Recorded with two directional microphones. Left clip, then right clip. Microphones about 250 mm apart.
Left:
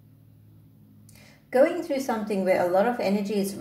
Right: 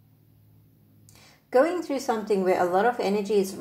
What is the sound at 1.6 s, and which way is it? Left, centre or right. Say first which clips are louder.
A woman's voice: left 2 dB; centre.